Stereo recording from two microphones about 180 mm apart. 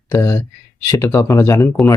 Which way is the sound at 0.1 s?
15° left (ahead or behind).